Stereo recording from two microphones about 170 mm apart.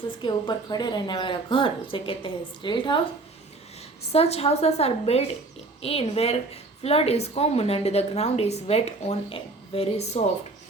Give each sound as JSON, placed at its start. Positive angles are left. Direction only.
{"t": 0.2, "sound": "a woman's voice", "side_deg": 25}
{"t": 4.1, "sound": "a woman's voice", "side_deg": 35}